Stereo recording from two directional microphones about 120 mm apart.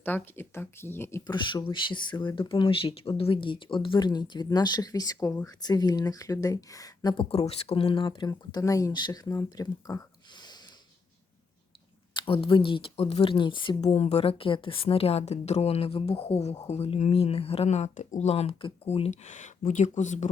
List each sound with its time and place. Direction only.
0.0 s speech: 15° left (ahead or behind)
1.3 s speech: 40° left (ahead or behind)
7.3 s speech: 55° left (ahead or behind); by 10.6 s 35° left (ahead or behind)
12.2 s speech: 50° left (ahead or behind)
13.8 s a woman's voice: 65° left (ahead or behind)
19.3 s speech: 90° left